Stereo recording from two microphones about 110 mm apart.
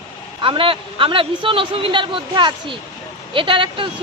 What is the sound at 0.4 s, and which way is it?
A man's voice, 50° right (ahead or behind).